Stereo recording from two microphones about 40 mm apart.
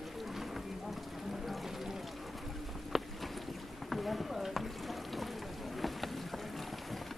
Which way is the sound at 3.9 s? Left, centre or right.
Centre.